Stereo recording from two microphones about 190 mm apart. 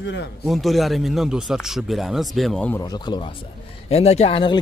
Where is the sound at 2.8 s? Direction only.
20° left (ahead or behind).